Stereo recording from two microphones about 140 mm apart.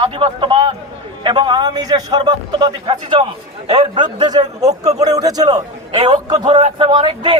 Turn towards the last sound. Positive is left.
turn(degrees=-35)  # may be behind; listen again after turning